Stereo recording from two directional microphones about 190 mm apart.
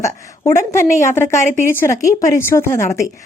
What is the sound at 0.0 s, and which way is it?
A woman's voice, 15° left (ahead or behind).